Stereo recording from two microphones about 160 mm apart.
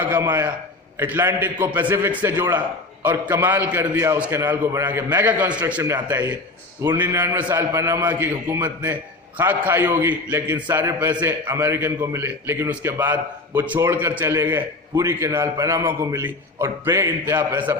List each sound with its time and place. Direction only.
0.0 s a man's voice: 10° right (ahead or behind)